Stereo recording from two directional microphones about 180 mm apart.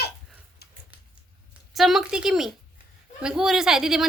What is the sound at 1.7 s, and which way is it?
Speech, centre (ahead or behind).